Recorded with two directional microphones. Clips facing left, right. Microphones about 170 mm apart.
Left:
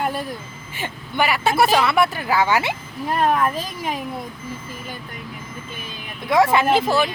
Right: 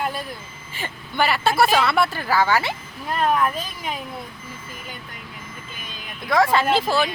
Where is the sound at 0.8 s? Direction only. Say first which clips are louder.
Left 1 dB; 15° left (ahead or behind).